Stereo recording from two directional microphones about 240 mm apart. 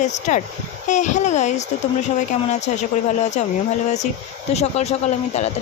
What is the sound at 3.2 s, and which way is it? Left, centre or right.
Speech, left.